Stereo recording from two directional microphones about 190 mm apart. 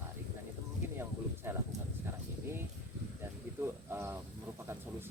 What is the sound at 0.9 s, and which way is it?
Speech, 15° right (ahead or behind).